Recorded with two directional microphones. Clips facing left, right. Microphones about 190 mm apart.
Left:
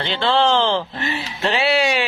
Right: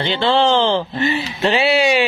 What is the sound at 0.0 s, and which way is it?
Speech, centre (ahead or behind).